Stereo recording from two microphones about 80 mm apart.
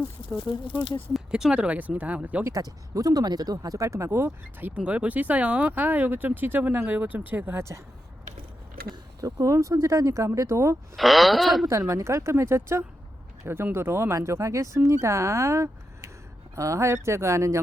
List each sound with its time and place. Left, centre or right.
1.3 s speech: centre
2.6 s speech: right
4.7 s speech: centre
9.2 s speech: right
10.9 s speech: centre
11.9 s speech: right